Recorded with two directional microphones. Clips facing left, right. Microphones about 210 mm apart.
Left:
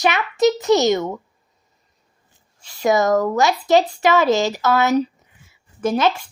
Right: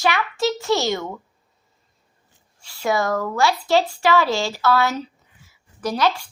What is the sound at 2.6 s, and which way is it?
A woman's voice, 20° left (ahead or behind).